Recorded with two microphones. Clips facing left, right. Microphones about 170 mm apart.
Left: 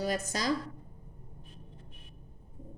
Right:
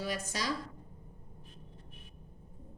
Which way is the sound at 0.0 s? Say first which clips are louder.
Left 5 dB; 45° left (ahead or behind).